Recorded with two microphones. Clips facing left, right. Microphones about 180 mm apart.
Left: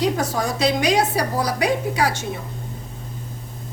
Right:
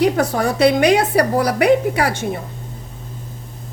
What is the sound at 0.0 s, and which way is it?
A woman's voice, 60° right (ahead or behind).